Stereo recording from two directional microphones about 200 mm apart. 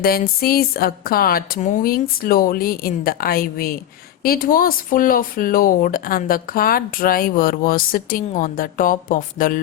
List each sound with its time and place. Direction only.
0.0 s speech: 50° left (ahead or behind)